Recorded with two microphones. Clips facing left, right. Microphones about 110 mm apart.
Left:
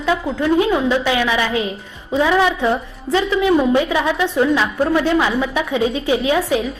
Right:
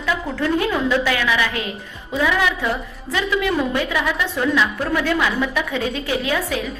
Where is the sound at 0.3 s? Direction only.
20° left (ahead or behind).